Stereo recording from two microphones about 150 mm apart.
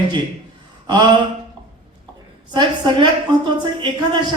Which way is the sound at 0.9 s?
30° right (ahead or behind).